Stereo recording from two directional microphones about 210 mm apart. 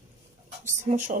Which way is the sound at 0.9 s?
35° right (ahead or behind).